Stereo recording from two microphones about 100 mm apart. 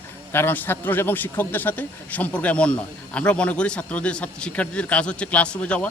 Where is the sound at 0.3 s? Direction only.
20° left (ahead or behind).